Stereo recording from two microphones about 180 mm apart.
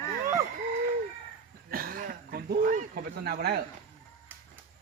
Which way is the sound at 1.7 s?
55° right (ahead or behind).